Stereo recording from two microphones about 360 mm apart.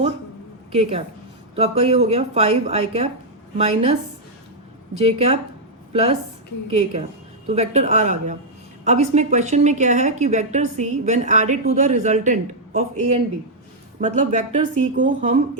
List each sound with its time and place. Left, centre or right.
0.7 s speech: centre
4.9 s speech: centre